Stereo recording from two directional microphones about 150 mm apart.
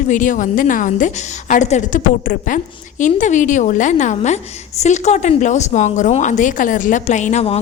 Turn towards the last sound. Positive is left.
turn(degrees=45)  # may be behind; listen again after turning